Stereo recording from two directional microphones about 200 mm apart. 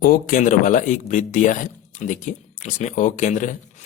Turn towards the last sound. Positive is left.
turn(degrees=40)  # may be behind; listen again after turning